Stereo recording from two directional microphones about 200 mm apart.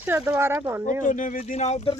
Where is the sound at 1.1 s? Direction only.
40° left (ahead or behind).